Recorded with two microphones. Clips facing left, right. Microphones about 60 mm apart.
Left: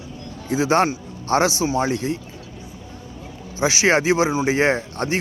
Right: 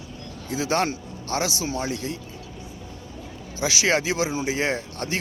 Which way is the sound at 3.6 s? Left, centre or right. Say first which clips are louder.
Left 5 dB; left.